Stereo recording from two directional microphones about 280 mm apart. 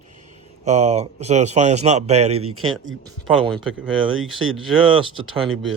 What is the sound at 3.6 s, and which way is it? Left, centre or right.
Speech, centre.